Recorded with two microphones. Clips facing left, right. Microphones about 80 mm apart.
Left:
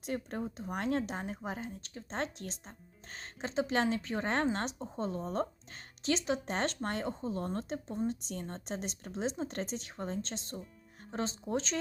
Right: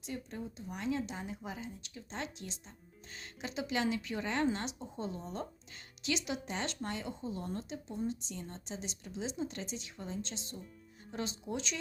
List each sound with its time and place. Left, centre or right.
0.0 s speech: left
11.1 s speech: left